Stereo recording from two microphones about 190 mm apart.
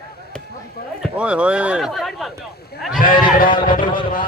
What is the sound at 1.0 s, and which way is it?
A man's voice, 5° right (ahead or behind).